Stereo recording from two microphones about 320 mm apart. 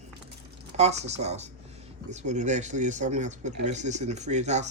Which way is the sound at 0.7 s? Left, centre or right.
Centre.